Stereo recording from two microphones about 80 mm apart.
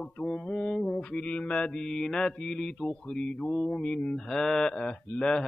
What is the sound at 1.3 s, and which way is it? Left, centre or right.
Mantra, centre.